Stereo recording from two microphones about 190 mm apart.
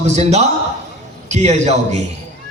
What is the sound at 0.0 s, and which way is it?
A man's voice, 35° right (ahead or behind).